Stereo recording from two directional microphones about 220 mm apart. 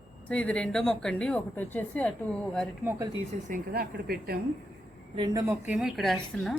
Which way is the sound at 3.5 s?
45° right (ahead or behind).